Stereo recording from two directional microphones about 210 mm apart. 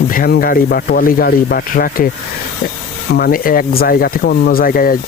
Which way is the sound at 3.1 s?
45° left (ahead or behind).